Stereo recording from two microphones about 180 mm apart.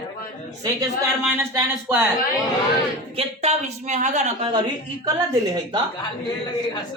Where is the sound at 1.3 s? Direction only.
15° right (ahead or behind).